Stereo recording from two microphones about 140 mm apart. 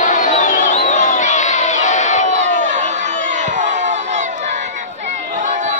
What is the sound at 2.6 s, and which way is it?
Crowd, 60° right (ahead or behind).